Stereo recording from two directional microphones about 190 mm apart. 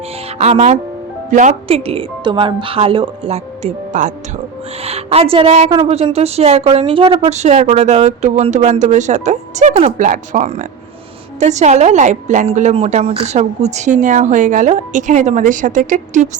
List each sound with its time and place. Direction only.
0.3 s a woman's voice: 35° right (ahead or behind)